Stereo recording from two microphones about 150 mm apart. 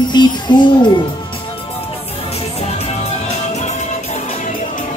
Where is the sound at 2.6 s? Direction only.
45° left (ahead or behind).